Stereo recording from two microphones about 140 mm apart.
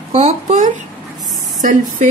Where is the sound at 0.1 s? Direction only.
50° right (ahead or behind).